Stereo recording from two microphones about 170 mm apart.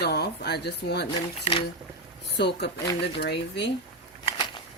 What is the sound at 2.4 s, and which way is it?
Speech, 80° left.